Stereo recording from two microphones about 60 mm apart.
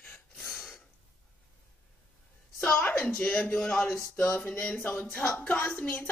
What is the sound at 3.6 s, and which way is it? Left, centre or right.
Speech, centre.